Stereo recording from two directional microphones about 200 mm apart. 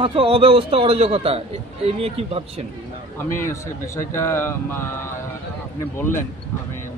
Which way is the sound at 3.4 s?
15° left (ahead or behind).